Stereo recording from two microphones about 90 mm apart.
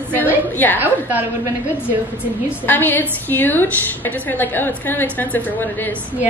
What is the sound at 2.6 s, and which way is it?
A woman's voice, 20° left (ahead or behind).